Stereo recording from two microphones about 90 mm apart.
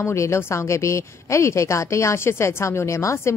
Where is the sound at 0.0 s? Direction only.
30° left (ahead or behind).